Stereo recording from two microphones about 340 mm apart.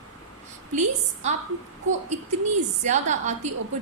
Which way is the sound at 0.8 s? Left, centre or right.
Right.